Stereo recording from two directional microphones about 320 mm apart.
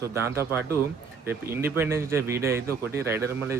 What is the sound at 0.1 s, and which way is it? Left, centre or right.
Speech, centre.